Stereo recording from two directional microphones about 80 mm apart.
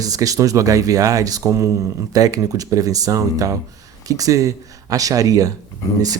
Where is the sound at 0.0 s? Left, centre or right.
Right.